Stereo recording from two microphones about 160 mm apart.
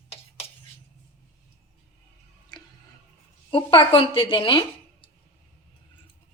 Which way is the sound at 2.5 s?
25° left (ahead or behind).